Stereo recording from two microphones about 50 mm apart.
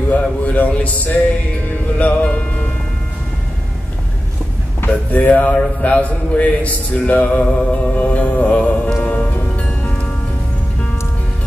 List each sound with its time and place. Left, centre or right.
0.1 s music: left
4.8 s a man's voice: left
9.6 s music: left